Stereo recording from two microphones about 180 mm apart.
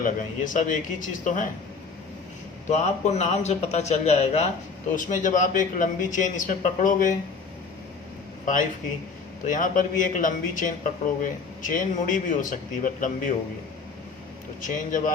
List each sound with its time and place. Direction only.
0.0 s a man's voice: 45° left (ahead or behind)
2.6 s a man's voice: 40° left (ahead or behind)
9.5 s a man's voice: 45° left (ahead or behind)
14.6 s a man's voice: 50° left (ahead or behind)